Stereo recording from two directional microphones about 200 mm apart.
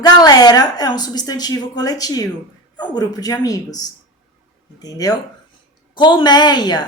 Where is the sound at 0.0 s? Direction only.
20° left (ahead or behind).